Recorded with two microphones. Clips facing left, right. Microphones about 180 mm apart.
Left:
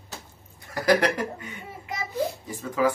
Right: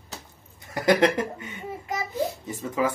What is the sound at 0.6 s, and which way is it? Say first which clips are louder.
Speech: right 1 dB; 20° right (ahead or behind).